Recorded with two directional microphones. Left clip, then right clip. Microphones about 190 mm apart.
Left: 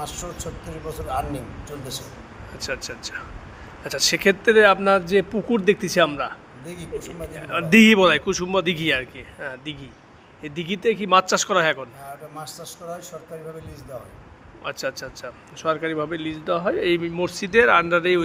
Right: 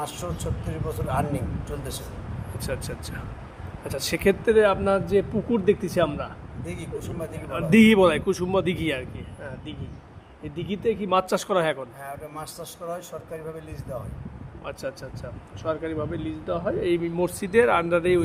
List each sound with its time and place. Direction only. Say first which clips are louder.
1.0 s speech: left 1 dB; centre (ahead or behind)
2.6 s speech: left 3 dB; 20° right (ahead or behind)
3.8 s speech: left 4 dB; 5° right (ahead or behind)
4.5 s a man's voice: left 6 dB; 5° left (ahead or behind)
11.2 s a man's voice: left 4 dB; 10° right (ahead or behind)
14.6 s speech: left 5 dB; centre (ahead or behind)
17.0 s a man's voice: left 1 dB; 15° right (ahead or behind)